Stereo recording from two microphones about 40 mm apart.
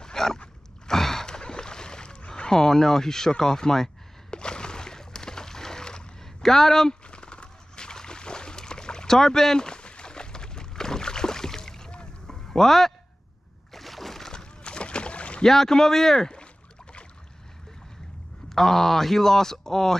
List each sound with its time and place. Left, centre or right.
0.0 s dog: centre
0.8 s boat: centre
2.5 s speech: centre
4.3 s a sound: left
7.1 s a sound: left; by 14.3 s centre
14.3 s rowboat: left
15.4 s speech: centre
18.5 s speech: centre